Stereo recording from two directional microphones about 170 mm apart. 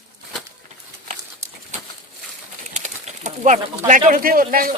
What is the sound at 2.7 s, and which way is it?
Bird, 45° right (ahead or behind).